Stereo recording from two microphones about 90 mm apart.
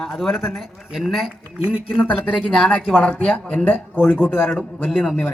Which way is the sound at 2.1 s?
15° left (ahead or behind).